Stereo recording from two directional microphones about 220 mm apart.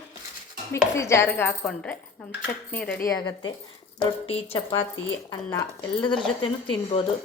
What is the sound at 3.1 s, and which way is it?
A woman's voice, 20° left (ahead or behind).